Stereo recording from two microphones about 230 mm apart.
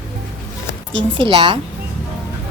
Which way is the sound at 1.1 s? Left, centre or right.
Right.